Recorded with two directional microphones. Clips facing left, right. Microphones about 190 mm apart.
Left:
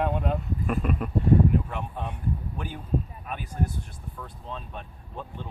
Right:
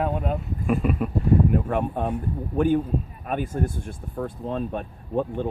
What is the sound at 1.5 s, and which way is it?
Speech, 50° right (ahead or behind).